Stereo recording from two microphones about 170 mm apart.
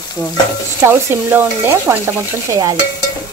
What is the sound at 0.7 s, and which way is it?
Stir, 15° right (ahead or behind).